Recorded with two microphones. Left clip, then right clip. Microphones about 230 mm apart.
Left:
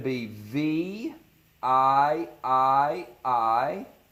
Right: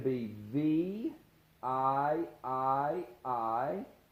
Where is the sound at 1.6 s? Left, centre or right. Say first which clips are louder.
Left 10 dB; left.